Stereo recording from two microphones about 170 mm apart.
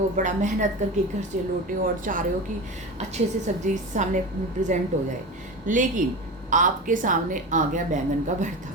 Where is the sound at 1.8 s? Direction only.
50° right (ahead or behind).